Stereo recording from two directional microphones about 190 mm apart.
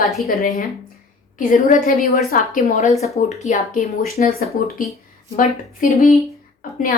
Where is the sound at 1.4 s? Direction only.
40° left (ahead or behind).